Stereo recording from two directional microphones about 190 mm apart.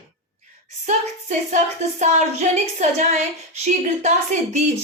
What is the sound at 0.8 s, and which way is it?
A woman's voice, 40° right (ahead or behind).